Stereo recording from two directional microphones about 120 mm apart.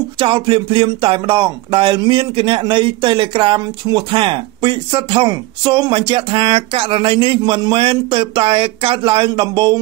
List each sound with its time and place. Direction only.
0.2 s speech: 45° right (ahead or behind)